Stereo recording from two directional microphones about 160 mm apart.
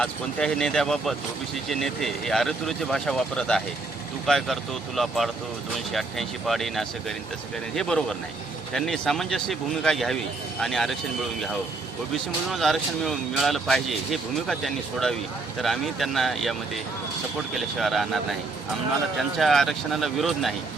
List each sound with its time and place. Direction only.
0.0 s speech: 5° left (ahead or behind)
12.1 s speech: centre (ahead or behind)